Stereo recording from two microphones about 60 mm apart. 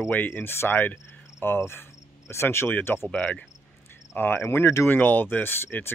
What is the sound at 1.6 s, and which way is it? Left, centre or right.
Cricket, left.